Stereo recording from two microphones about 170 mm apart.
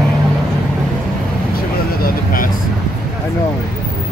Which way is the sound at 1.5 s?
55° left (ahead or behind).